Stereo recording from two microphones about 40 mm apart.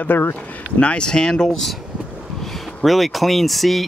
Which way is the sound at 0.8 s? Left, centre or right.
Left.